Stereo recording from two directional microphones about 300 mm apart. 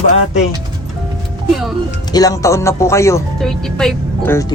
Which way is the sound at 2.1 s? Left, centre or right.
Centre.